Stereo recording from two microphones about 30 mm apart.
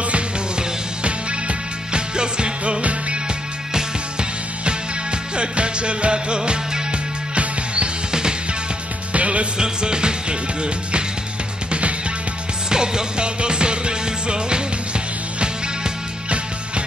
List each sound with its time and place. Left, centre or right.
0.6 s music: right
2.6 s music: right
3.7 s music: right
8.1 s music: right
9.1 s music: right
9.6 s music: right
12.6 s music: right